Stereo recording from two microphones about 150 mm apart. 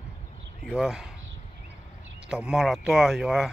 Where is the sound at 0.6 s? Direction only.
5° right (ahead or behind).